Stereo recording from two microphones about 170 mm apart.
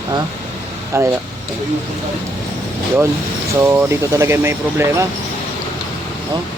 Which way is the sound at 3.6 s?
15° right (ahead or behind).